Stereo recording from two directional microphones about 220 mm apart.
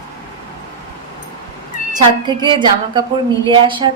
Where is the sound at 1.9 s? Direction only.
20° right (ahead or behind).